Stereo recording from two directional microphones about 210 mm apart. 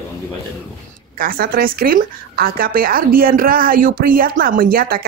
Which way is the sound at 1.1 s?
45° right (ahead or behind).